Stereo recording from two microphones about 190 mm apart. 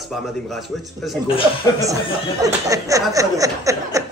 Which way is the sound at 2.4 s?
15° right (ahead or behind).